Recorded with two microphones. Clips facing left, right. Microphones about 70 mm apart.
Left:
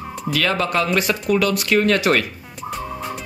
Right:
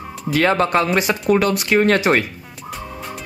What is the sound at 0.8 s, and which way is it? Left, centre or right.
Speech, right.